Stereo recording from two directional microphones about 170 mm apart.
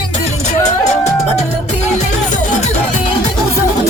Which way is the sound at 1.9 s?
40° left (ahead or behind).